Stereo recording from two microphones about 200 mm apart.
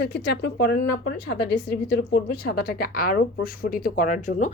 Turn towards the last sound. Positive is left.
turn(degrees=40)  # may be behind; listen again after turning